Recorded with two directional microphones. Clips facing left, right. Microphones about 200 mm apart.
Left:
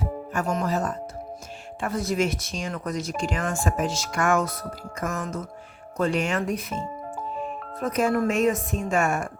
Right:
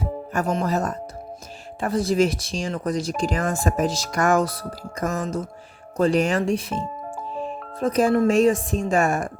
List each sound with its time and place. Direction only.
0.3 s speech: 35° right (ahead or behind)